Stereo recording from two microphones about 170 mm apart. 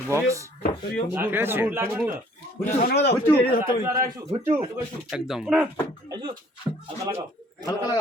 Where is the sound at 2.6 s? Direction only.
50° left (ahead or behind).